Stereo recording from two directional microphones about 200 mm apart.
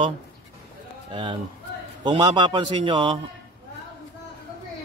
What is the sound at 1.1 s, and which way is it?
Speech, 25° right (ahead or behind).